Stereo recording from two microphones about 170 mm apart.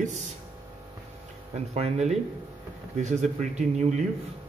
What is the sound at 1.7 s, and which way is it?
Speech, 40° right (ahead or behind).